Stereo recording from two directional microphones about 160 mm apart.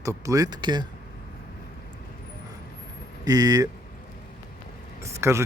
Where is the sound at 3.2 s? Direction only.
25° right (ahead or behind).